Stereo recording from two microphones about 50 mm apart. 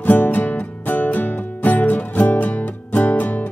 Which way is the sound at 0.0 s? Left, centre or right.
Left.